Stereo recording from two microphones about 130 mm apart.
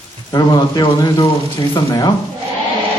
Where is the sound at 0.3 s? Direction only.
30° left (ahead or behind).